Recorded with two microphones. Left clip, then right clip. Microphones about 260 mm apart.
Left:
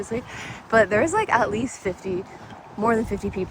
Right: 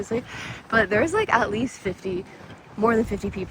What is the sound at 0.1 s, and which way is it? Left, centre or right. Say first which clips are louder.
Speech: right 1 dB; centre.